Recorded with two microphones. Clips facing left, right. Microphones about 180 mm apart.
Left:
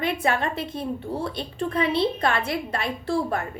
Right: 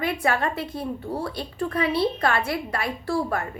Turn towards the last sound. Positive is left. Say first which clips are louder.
# even
turn(degrees=25)  # may be behind; listen again after turning